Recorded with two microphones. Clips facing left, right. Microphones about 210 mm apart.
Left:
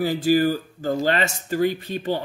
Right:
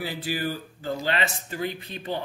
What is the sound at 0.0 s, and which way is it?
A man's voice, 40° left (ahead or behind).